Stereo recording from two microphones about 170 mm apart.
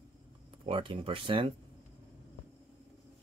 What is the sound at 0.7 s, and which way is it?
Speech, 30° right (ahead or behind).